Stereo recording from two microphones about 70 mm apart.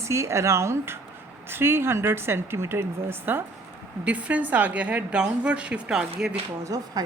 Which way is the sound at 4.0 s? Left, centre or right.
Centre.